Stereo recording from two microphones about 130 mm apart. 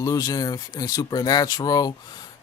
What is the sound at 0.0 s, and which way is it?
Speech, 30° left (ahead or behind).